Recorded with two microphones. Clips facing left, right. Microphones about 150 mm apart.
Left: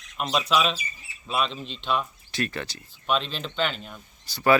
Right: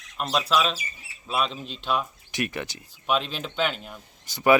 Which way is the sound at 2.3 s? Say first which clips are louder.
Even; 15° right (ahead or behind).